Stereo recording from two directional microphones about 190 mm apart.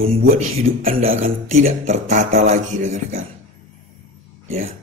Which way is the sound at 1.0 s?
35° right (ahead or behind).